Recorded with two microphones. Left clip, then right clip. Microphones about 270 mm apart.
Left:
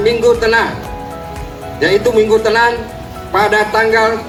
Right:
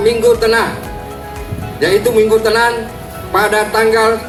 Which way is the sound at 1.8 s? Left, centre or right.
Left.